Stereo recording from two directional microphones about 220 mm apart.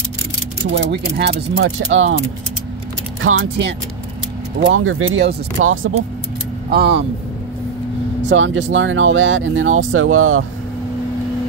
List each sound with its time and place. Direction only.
0.7 s speech: 55° right (ahead or behind)
6.7 s speech: 45° right (ahead or behind)
8.3 s speech: 55° right (ahead or behind)